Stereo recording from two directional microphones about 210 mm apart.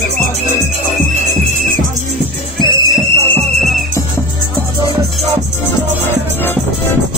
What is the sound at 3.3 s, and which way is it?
Music, 10° left (ahead or behind).